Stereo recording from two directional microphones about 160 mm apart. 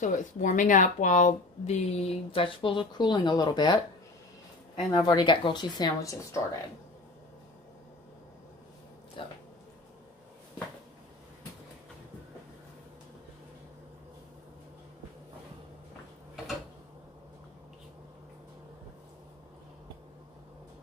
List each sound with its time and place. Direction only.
0.0 s speech: 50° left (ahead or behind); by 3.8 s 25° left (ahead or behind)
4.9 s speech: 25° left (ahead or behind)
9.2 s speech: 35° left (ahead or behind)